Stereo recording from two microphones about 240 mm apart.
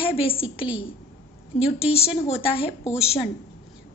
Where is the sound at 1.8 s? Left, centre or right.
Left.